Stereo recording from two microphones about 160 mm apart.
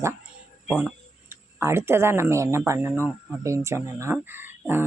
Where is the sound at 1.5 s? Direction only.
15° right (ahead or behind).